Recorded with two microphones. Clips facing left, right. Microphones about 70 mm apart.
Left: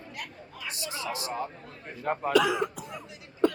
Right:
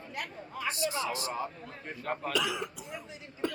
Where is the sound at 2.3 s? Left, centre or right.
Left.